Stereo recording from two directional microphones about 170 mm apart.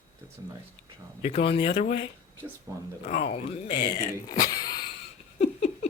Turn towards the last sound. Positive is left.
turn(degrees=45)  # may be behind; listen again after turning